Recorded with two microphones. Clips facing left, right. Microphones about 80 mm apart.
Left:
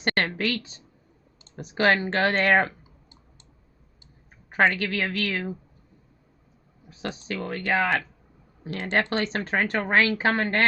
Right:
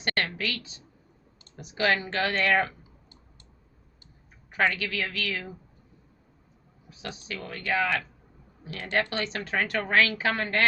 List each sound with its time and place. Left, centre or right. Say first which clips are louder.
0.0 s a sound: left 4 dB; left
1.5 s speech: left 4 dB; left
4.7 s speech: left 4 dB; left
6.9 s speech: left 6 dB; left
8.6 s speech: left 5 dB; left
9.0 s speech: left 3 dB; left